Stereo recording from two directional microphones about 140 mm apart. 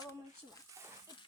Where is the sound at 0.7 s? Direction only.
20° right (ahead or behind).